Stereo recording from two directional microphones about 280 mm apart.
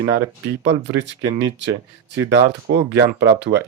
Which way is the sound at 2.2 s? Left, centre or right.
Right.